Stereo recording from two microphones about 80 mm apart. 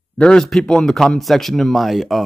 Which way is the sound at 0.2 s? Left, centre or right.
Centre.